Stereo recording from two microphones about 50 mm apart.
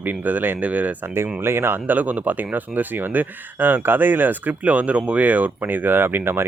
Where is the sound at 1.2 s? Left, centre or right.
Right.